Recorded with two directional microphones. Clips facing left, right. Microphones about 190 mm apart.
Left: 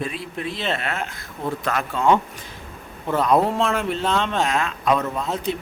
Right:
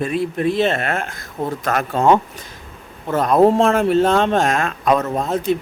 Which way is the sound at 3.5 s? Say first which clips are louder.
Right 8 dB; 45° right (ahead or behind).